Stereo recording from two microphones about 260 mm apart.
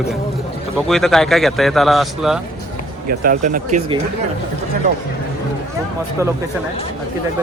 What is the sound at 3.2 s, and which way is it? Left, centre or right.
Speech, right.